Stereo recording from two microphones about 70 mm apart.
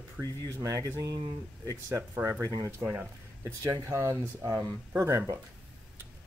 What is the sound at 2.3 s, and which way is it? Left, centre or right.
Speech, right.